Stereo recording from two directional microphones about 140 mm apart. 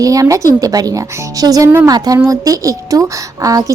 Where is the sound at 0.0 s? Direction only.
25° right (ahead or behind).